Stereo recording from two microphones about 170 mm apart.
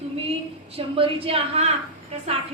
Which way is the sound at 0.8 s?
30° right (ahead or behind).